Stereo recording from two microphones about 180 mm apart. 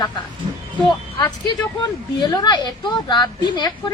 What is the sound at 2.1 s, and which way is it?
A woman's voice, 25° left (ahead or behind).